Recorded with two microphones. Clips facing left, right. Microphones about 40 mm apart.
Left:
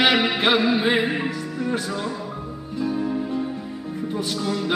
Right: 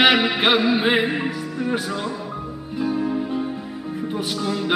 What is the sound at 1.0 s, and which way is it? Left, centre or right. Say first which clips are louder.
Music: right 1 dB; centre.